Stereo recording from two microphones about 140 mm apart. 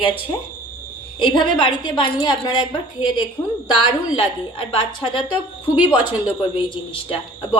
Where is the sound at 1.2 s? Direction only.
35° left (ahead or behind).